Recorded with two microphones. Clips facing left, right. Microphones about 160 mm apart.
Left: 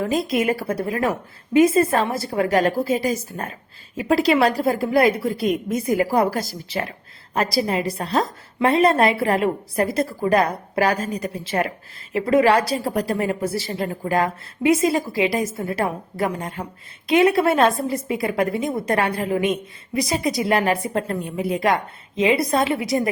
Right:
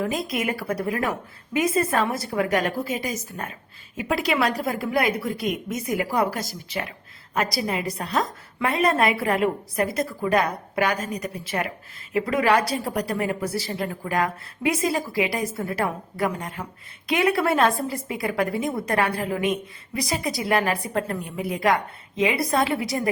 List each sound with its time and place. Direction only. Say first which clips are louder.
0.0 s a woman's voice: left 5 dB; 30° left (ahead or behind)